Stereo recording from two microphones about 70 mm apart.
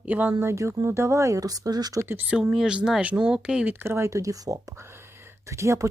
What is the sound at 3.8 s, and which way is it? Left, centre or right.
Speech, right.